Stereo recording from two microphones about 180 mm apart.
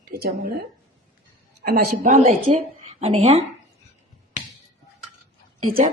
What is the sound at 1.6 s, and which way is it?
Speech, 50° right (ahead or behind).